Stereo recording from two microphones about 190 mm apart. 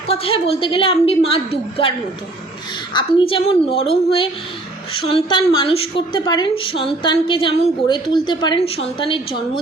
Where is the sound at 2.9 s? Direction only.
25° left (ahead or behind).